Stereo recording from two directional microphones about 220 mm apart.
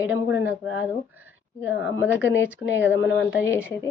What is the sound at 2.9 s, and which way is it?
Speech, 10° right (ahead or behind).